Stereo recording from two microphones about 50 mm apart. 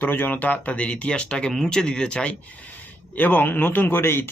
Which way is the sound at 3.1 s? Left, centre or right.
Left.